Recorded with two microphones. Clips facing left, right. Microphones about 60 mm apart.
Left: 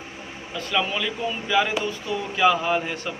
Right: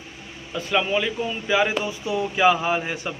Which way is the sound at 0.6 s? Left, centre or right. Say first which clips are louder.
Right 3 dB; centre.